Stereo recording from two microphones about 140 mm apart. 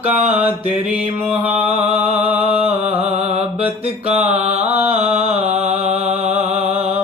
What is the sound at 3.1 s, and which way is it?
Mantra, 45° right (ahead or behind).